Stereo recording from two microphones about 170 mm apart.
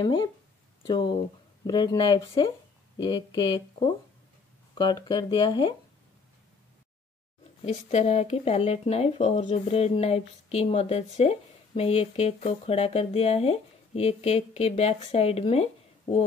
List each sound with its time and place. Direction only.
0.0 s speech: 25° left (ahead or behind)
7.6 s speech: 40° left (ahead or behind)